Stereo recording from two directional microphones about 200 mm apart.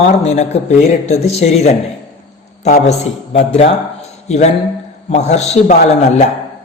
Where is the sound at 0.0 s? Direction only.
35° left (ahead or behind).